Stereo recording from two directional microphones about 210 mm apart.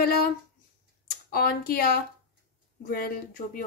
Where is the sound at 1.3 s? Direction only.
45° left (ahead or behind).